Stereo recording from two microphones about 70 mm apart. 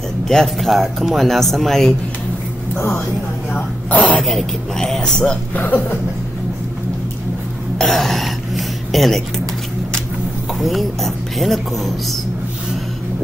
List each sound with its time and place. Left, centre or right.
0.3 s speech: centre
3.5 s speech: centre
4.2 s speech: centre
5.5 s speech: left
7.7 s speech: centre
10.6 s speech: centre